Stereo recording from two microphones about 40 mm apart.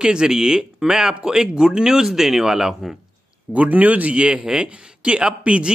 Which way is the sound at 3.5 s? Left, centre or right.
Right.